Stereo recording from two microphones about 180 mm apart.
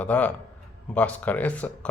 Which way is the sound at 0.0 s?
10° left (ahead or behind).